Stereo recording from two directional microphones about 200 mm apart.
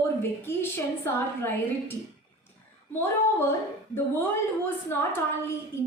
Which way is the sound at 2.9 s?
10° left (ahead or behind).